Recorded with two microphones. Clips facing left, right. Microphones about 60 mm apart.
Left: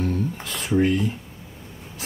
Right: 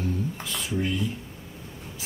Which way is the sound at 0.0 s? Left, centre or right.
Left.